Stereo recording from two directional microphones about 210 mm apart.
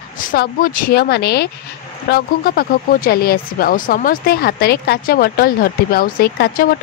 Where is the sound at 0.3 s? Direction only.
40° left (ahead or behind).